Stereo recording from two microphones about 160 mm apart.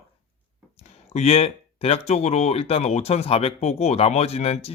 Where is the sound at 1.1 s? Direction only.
40° left (ahead or behind).